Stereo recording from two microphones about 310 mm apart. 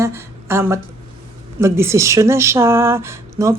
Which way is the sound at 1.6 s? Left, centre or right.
Centre.